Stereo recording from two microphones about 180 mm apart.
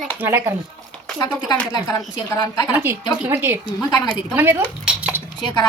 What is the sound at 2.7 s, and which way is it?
A woman's voice, 10° right (ahead or behind).